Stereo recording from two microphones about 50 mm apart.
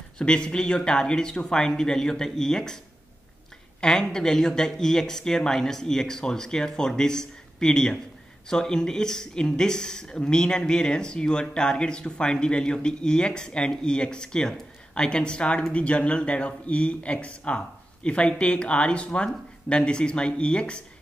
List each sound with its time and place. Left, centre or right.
0.2 s speech: centre
3.8 s speech: centre